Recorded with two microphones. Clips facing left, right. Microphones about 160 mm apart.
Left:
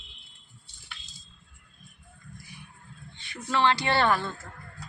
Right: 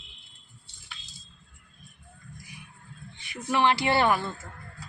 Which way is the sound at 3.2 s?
20° right (ahead or behind).